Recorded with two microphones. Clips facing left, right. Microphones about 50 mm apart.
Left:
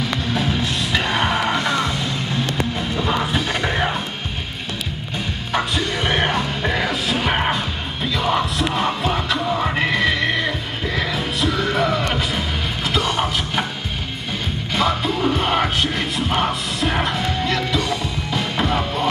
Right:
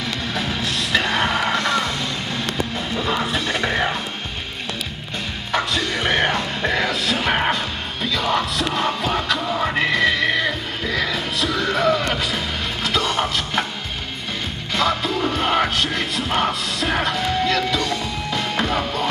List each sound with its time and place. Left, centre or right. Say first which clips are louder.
0.3 s music: left 2 dB; centre
3.0 s music: left 1 dB; centre
5.5 s music: even; centre
7.5 s music: left 1 dB; centre
14.7 s music: even; centre